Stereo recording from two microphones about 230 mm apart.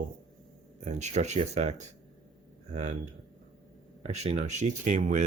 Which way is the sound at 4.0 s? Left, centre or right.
Right.